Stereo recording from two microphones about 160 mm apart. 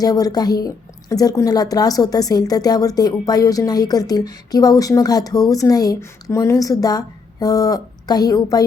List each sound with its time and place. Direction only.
0.0 s a woman's voice: 25° left (ahead or behind)